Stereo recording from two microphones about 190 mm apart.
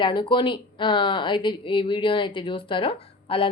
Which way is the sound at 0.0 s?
25° left (ahead or behind).